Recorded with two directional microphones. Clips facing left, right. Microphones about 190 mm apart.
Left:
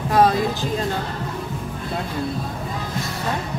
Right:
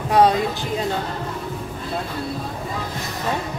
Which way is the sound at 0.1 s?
20° right (ahead or behind).